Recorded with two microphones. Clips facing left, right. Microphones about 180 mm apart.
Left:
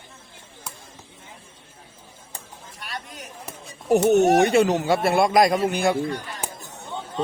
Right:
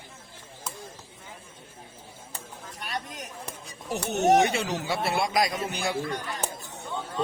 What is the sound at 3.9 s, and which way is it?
Speech, 50° left (ahead or behind).